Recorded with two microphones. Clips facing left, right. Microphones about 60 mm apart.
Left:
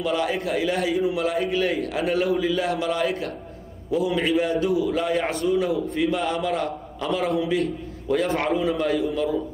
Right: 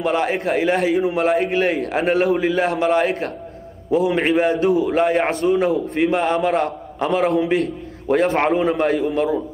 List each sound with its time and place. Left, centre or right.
0.0 s a man's voice: right